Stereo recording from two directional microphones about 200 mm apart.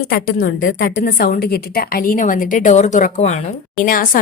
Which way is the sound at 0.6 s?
70° left (ahead or behind).